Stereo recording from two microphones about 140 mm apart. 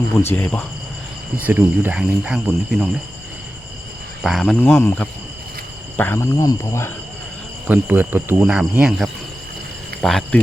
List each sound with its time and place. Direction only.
0.3 s speech: 15° left (ahead or behind)
1.4 s speech: 15° right (ahead or behind)
4.2 s speech: centre (ahead or behind); by 6.9 s 20° left (ahead or behind)
7.7 s speech: 10° right (ahead or behind)